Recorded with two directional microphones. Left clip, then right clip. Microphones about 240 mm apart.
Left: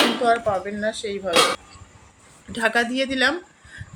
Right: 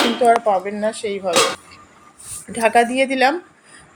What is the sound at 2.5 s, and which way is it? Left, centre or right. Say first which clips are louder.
Speech: right 6 dB; centre.